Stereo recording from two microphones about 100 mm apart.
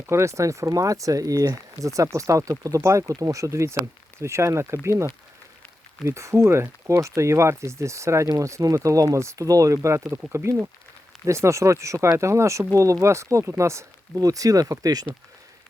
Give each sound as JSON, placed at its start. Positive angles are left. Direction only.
{"t": 0.0, "sound": "speech", "side_deg": -25}